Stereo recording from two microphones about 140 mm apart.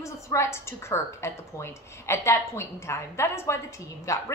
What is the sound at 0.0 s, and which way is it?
A woman's voice, 20° left (ahead or behind).